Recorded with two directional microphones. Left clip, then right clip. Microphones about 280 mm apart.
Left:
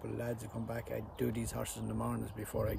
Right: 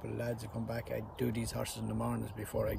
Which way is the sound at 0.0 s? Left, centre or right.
Centre.